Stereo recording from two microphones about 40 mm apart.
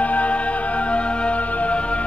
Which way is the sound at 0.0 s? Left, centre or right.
Left.